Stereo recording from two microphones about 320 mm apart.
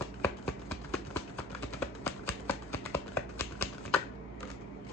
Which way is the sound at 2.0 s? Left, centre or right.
Centre.